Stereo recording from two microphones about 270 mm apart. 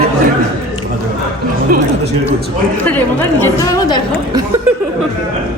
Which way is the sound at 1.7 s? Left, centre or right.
Right.